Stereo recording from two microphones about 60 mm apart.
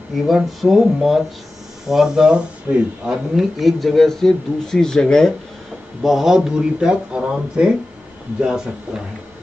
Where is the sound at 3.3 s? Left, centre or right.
Centre.